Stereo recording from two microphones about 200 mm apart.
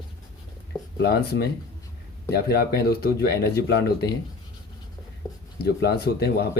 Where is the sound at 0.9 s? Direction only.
50° left (ahead or behind).